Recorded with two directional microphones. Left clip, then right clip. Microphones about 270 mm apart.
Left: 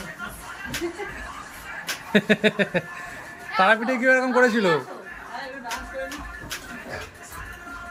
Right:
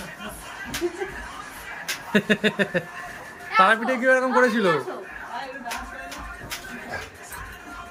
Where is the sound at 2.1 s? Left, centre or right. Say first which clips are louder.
Left 2 dB; centre.